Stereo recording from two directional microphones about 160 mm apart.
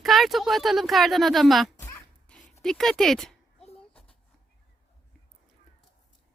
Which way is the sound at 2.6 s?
Centre (ahead or behind).